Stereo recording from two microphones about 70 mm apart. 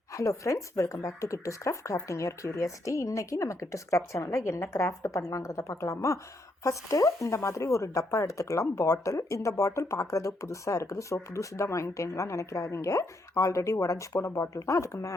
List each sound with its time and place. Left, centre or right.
0.1 s speech: left